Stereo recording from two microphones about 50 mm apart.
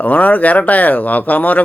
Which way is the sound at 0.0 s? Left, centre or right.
Left.